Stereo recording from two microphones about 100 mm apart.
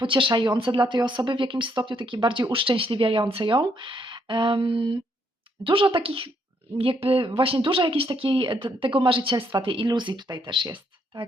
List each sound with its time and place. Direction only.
0.0 s a woman's voice: 55° right (ahead or behind)